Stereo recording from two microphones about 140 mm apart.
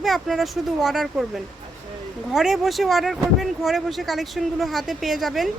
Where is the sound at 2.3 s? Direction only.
5° right (ahead or behind).